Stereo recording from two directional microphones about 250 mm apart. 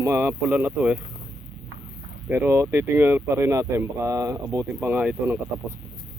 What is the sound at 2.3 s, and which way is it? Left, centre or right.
Speech, centre.